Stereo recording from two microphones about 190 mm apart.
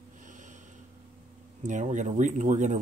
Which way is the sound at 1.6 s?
40° right (ahead or behind).